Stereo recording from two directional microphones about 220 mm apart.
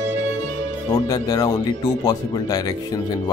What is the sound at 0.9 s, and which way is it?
Speech, 15° left (ahead or behind).